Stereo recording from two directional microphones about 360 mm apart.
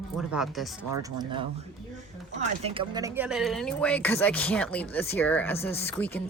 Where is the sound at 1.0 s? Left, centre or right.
Centre.